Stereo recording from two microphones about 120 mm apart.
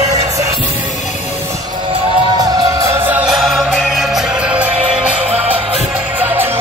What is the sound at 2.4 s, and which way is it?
Music, 30° right (ahead or behind).